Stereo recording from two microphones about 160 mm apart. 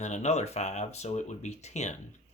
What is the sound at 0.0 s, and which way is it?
Speech, 45° left (ahead or behind).